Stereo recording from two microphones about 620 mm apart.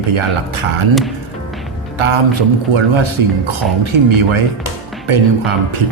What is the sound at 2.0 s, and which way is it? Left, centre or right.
Speech, right.